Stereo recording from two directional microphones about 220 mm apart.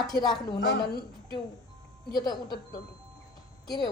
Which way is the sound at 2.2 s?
20° left (ahead or behind).